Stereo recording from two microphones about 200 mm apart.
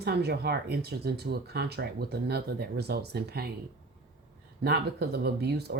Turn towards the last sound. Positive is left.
turn(degrees=-55)  # may be behind; listen again after turning